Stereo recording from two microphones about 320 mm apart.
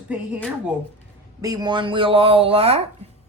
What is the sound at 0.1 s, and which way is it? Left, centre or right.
Speech, centre.